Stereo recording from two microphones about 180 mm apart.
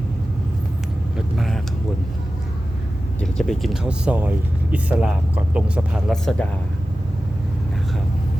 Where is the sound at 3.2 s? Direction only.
5° left (ahead or behind).